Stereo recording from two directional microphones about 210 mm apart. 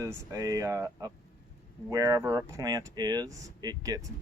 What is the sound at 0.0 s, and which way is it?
Speech, 15° right (ahead or behind).